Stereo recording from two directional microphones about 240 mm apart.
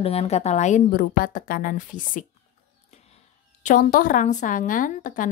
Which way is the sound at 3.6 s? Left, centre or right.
Left.